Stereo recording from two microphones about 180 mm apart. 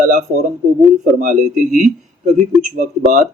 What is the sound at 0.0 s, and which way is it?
A man's voice, 45° right (ahead or behind).